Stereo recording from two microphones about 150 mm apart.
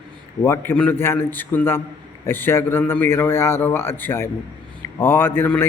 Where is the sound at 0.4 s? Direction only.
15° left (ahead or behind).